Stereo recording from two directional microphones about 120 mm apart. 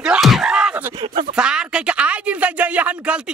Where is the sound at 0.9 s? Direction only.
40° right (ahead or behind).